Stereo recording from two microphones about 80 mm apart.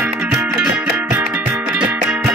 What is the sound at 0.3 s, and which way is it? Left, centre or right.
Music, centre.